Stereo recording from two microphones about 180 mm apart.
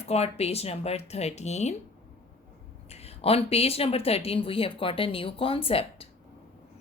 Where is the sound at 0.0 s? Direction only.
35° left (ahead or behind).